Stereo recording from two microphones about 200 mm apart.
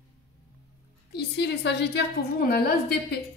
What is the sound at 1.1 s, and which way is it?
A woman's voice, 55° left (ahead or behind).